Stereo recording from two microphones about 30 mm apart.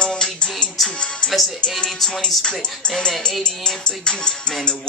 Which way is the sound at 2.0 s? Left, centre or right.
Centre.